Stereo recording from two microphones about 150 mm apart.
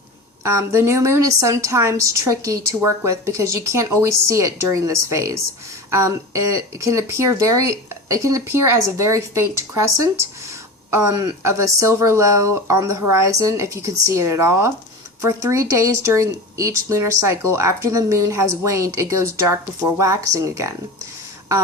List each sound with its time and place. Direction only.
0.4 s speech: 15° right (ahead or behind)